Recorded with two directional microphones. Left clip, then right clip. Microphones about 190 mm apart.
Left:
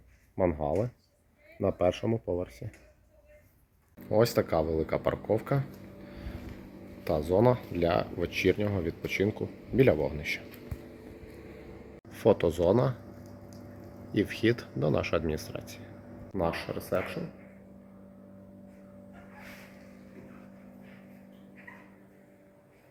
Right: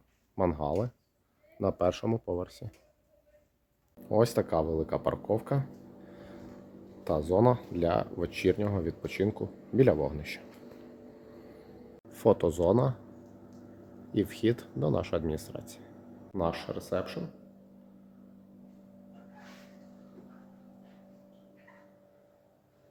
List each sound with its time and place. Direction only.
0.3 s speech: 15° right (ahead or behind)
4.1 s speech: 20° right (ahead or behind)
7.0 s speech: 20° right (ahead or behind)
12.0 s speech: 25° right (ahead or behind)
14.1 s speech: 20° right (ahead or behind)